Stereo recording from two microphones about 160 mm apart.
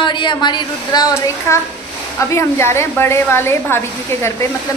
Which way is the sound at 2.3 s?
15° left (ahead or behind).